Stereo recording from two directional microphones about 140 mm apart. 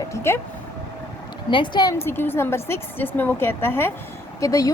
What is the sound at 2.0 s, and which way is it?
A woman's voice, 15° left (ahead or behind).